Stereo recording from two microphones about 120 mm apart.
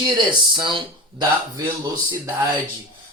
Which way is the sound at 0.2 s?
40° right (ahead or behind).